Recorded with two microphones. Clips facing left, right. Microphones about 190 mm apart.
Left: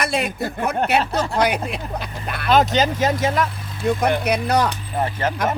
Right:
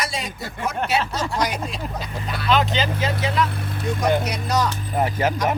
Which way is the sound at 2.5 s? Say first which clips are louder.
Left 4 dB; 45° left (ahead or behind).